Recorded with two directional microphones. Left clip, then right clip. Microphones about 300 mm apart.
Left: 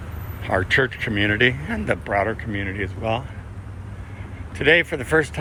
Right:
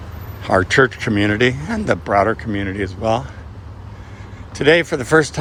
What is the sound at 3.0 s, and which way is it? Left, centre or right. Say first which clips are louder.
Speech: right 7 dB; right.